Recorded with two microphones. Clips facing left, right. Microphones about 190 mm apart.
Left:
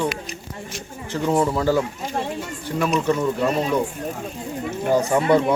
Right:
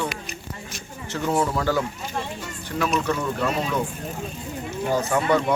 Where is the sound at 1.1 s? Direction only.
10° left (ahead or behind).